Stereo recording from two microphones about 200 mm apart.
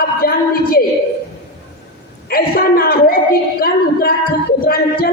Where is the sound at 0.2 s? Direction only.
45° left (ahead or behind).